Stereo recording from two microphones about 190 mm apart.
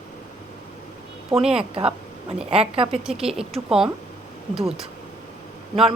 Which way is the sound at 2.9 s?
5° right (ahead or behind).